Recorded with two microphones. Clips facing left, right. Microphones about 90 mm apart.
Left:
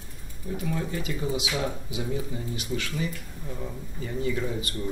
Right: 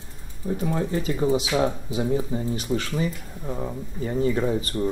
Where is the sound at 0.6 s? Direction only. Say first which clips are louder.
Right 5 dB; 35° right (ahead or behind).